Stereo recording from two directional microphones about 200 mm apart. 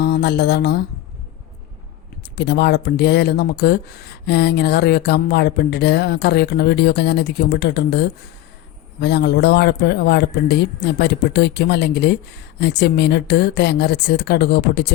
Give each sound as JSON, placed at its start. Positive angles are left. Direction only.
{"t": 0.0, "sound": "speech", "side_deg": 55}
{"t": 2.3, "sound": "speech", "side_deg": 55}